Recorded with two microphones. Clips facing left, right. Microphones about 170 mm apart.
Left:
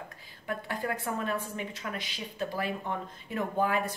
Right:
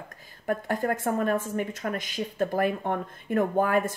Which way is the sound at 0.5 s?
45° right (ahead or behind).